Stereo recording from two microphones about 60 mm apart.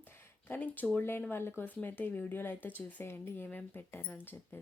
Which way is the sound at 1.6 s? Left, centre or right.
Left.